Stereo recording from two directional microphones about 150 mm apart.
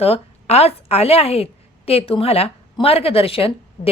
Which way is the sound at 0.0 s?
40° left (ahead or behind).